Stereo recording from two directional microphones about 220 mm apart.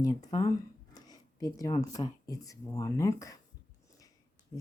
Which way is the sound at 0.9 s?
15° left (ahead or behind).